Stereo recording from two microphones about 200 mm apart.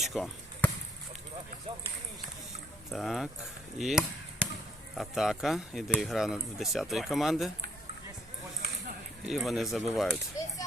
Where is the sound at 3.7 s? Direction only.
Centre (ahead or behind).